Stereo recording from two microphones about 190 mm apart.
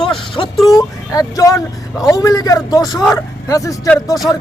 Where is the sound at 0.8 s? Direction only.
20° left (ahead or behind).